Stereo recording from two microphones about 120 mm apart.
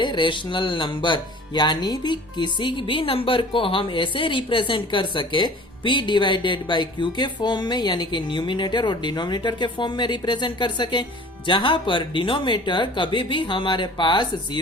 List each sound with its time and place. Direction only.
0.0 s speech: 40° left (ahead or behind)